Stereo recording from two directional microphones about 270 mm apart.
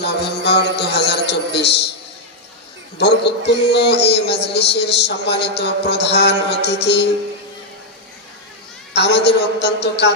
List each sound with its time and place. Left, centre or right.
0.0 s music: left
3.0 s a man's voice: left
8.9 s a man's voice: left